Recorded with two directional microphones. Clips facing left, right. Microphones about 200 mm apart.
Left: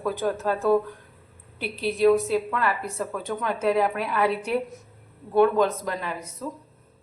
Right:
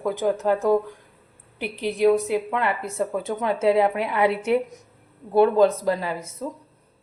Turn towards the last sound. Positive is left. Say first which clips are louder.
# right 6 dB
turn(degrees=-30)  # may be behind; listen again after turning